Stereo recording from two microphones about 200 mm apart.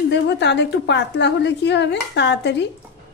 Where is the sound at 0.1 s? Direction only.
60° left (ahead or behind).